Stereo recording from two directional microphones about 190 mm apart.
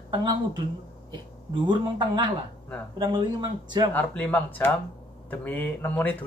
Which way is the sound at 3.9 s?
10° left (ahead or behind).